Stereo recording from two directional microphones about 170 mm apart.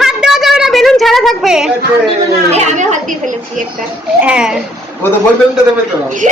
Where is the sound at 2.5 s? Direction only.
45° right (ahead or behind).